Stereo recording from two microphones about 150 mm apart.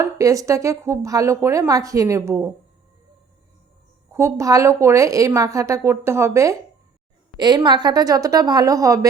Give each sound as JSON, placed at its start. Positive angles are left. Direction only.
{"t": 0.0, "sound": "a woman's voice", "side_deg": -20}
{"t": 4.1, "sound": "a woman's voice", "side_deg": -15}
{"t": 7.3, "sound": "a woman's voice", "side_deg": -30}